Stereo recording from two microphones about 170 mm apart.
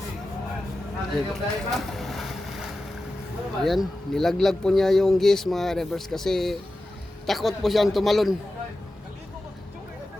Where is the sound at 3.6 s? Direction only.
Centre (ahead or behind).